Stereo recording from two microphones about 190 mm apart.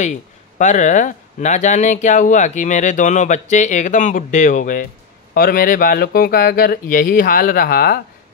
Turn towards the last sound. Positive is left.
turn(degrees=50)  # may be behind; listen again after turning